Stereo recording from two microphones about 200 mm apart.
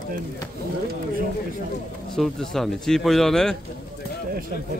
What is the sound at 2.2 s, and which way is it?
Speech, centre (ahead or behind).